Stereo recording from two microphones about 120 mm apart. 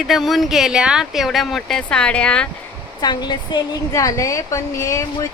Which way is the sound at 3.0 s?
35° left (ahead or behind).